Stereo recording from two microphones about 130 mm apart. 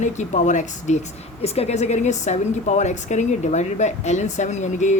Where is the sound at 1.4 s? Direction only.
50° left (ahead or behind).